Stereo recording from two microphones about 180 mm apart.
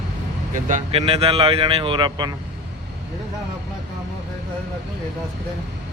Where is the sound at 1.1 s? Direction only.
30° right (ahead or behind).